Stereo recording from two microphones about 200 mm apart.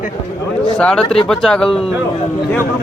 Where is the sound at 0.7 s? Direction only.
5° left (ahead or behind).